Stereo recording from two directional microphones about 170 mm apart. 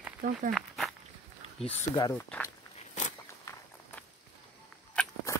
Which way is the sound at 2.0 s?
20° left (ahead or behind).